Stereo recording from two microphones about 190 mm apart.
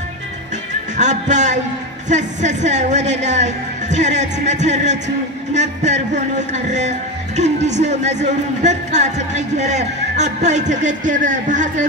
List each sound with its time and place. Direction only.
0.9 s speech: 40° right (ahead or behind)